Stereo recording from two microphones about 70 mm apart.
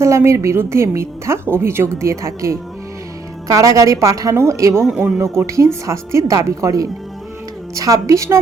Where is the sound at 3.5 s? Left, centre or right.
Right.